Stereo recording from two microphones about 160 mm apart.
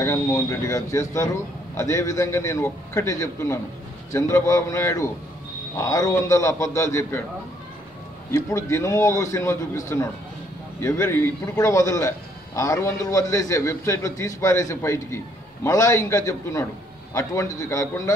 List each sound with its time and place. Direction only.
0.0 s a man's voice: 15° left (ahead or behind)
8.3 s a man's voice: 20° left (ahead or behind)